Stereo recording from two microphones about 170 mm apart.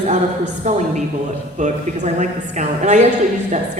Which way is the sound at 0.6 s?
45° right (ahead or behind).